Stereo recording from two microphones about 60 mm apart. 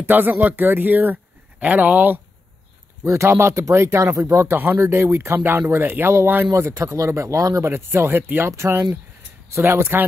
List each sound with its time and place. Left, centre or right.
0.1 s a man's voice: right
3.1 s speech: right
4.6 s a man's voice: right
6.5 s speech: right
7.6 s speech: right
8.2 s a man's voice: right
8.5 s speech: right